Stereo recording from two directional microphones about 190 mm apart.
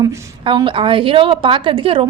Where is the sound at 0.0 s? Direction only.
25° right (ahead or behind).